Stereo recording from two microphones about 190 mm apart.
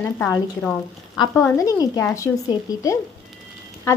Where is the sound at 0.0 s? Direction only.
10° left (ahead or behind).